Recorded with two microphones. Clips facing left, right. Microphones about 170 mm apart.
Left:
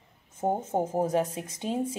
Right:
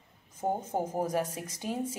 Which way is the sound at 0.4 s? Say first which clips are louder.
Left 4 dB; 25° left (ahead or behind).